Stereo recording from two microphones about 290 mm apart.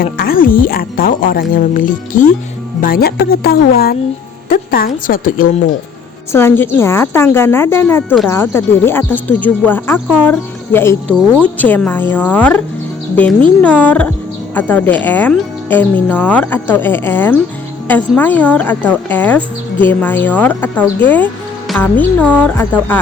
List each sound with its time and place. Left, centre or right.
0.0 s speech: left
6.3 s speech: centre
10.1 s speech: centre
10.7 s speech: centre